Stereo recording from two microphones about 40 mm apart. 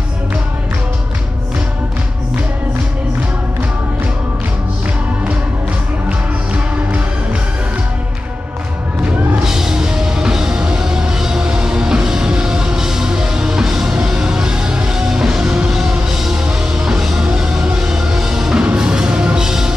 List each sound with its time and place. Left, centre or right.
6.0 s music: right
9.4 s music: centre
18.6 s music: right